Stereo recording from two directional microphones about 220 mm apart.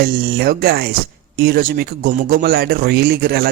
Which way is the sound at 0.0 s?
45° right (ahead or behind).